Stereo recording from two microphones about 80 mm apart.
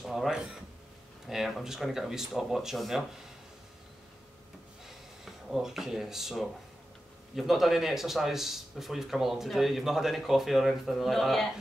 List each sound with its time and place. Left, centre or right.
0.0 s a man's voice: centre
4.8 s drawer open or close: centre
7.3 s a man's voice: centre